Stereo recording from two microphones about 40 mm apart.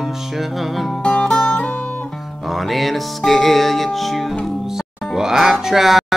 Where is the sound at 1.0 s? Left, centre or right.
Centre.